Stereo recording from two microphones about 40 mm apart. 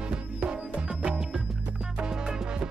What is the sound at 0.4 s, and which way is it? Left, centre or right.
Music, right.